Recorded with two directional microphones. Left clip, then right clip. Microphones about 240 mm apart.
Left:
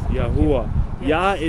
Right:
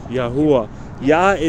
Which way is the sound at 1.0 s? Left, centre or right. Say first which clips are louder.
Right 5 dB; right.